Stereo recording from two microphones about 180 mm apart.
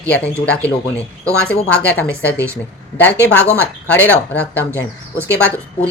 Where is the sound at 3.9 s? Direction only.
10° left (ahead or behind).